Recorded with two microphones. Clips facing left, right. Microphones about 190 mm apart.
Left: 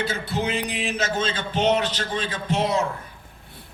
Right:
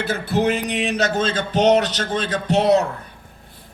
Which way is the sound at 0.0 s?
55° right (ahead or behind).